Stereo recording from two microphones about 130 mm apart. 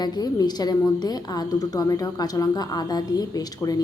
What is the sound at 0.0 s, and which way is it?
Speech, 30° left (ahead or behind).